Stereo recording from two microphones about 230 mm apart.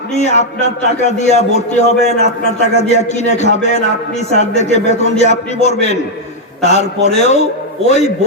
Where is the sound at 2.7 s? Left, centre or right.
Left.